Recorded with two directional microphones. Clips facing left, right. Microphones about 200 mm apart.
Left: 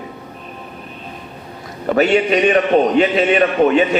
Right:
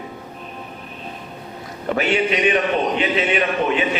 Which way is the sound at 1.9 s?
45° left (ahead or behind).